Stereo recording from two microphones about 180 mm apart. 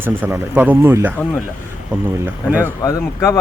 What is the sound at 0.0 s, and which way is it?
Speech, 10° right (ahead or behind).